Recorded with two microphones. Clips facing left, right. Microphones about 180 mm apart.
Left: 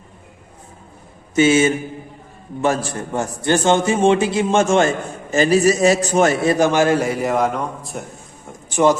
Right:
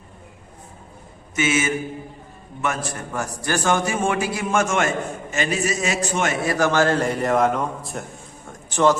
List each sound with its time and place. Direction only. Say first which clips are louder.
1.4 s a man's voice: left 8 dB; 30° left (ahead or behind)
6.4 s a man's voice: left 4 dB; 20° left (ahead or behind); by 8.0 s centre (ahead or behind)
8.7 s a man's voice: left 3 dB; 15° left (ahead or behind)